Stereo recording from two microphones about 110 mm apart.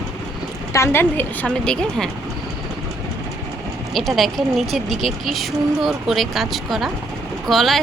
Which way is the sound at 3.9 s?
Centre (ahead or behind).